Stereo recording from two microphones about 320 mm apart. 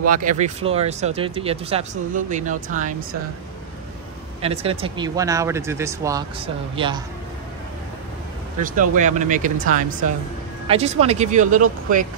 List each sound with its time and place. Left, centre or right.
0.0 s speech: right
4.4 s speech: centre
8.6 s speech: right
10.7 s speech: centre